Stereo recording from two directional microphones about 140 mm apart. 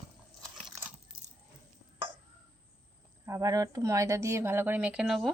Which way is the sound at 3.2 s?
20° right (ahead or behind).